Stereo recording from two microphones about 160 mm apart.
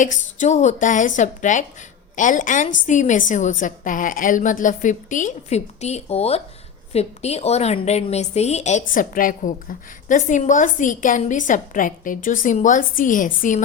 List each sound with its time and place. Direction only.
0.0 s a woman's voice: 50° left (ahead or behind)